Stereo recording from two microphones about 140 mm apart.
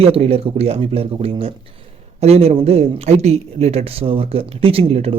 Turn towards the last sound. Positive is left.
turn(degrees=-45)  # may be behind; listen again after turning